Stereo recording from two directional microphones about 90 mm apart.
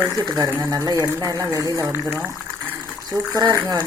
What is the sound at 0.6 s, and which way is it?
Speech, 40° right (ahead or behind).